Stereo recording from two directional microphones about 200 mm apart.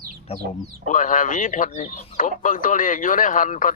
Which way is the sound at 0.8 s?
40° left (ahead or behind).